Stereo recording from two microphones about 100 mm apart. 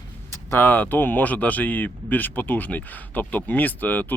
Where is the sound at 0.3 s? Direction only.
20° left (ahead or behind).